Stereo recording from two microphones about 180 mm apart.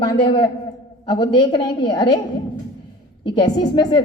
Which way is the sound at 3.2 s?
25° left (ahead or behind).